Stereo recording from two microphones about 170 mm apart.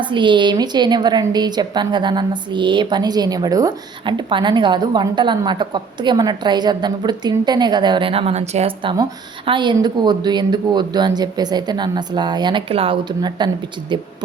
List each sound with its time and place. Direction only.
0.0 s a woman's voice: 30° right (ahead or behind)